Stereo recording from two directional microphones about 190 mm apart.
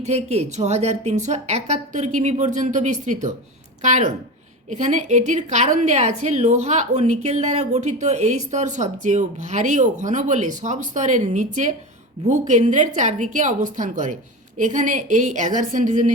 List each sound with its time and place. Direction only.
0.0 s a woman's voice: 35° right (ahead or behind)